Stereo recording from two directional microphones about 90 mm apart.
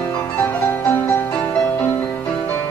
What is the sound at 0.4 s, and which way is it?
Music, 20° left (ahead or behind).